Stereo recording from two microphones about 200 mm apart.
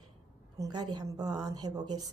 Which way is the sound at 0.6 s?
20° right (ahead or behind).